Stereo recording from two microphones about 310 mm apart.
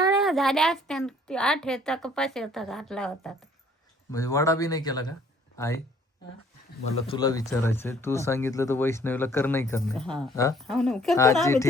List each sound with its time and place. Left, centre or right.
0.0 s a sound: centre
0.3 s a woman's voice: centre
7.1 s a woman's voice: centre